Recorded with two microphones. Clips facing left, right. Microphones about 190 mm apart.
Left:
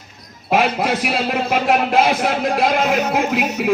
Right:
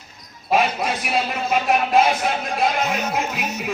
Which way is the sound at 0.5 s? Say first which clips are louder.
Left 3 dB; 60° left (ahead or behind).